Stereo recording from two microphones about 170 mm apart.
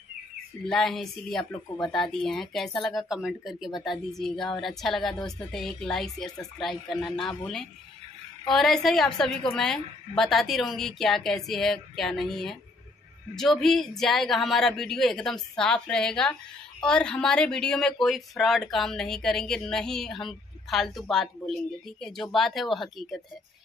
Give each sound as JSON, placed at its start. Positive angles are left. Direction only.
{"t": 0.7, "sound": "speech", "side_deg": 0}